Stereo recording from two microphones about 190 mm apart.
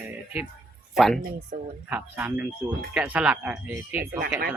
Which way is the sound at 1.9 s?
10° right (ahead or behind).